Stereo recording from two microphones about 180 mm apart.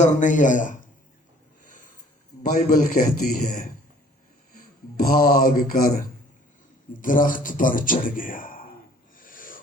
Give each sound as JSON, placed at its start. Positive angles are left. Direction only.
{"t": 0.0, "sound": "a man's voice", "side_deg": 45}
{"t": 1.6, "sound": "snort", "side_deg": 45}
{"t": 2.4, "sound": "a man's voice", "side_deg": 50}
{"t": 9.1, "sound": "rub", "side_deg": 50}